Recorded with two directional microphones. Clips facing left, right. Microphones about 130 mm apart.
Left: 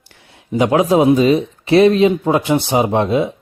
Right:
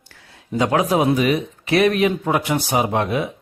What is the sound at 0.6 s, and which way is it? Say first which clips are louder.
Speech: left 5 dB; 25° left (ahead or behind).